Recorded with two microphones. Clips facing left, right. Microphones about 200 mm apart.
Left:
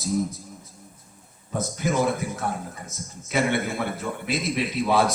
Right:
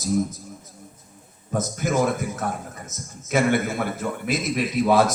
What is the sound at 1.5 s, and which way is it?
A man's voice, 45° right (ahead or behind).